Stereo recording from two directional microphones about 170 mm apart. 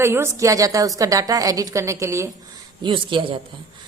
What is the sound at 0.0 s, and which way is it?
Speech, 15° right (ahead or behind).